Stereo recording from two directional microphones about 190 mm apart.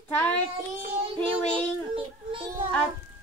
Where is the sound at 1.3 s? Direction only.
25° right (ahead or behind).